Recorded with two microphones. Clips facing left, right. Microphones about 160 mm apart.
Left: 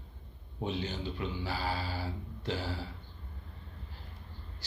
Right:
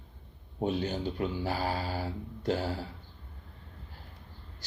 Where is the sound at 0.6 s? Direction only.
50° right (ahead or behind).